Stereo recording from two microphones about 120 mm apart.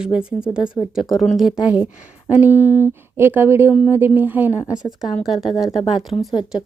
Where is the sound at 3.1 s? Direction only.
20° right (ahead or behind).